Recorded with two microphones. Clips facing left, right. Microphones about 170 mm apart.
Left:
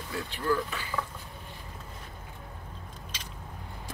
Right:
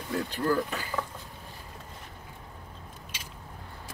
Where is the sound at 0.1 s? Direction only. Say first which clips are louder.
Right 2 dB; 40° right (ahead or behind).